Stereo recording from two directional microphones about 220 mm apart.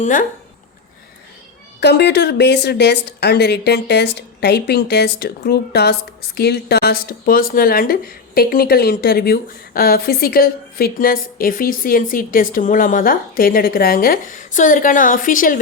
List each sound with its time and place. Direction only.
0.0 s a woman's voice: 40° left (ahead or behind)
1.8 s a woman's voice: 50° left (ahead or behind)